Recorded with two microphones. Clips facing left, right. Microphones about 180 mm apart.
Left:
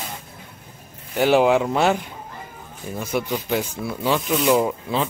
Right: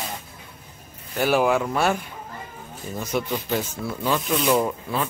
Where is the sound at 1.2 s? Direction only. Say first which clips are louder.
Left 4 dB; 20° left (ahead or behind).